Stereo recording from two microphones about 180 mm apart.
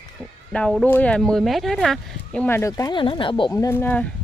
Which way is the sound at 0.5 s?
5° left (ahead or behind).